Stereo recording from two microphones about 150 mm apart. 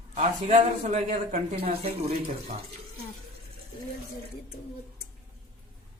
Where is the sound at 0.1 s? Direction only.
50° right (ahead or behind).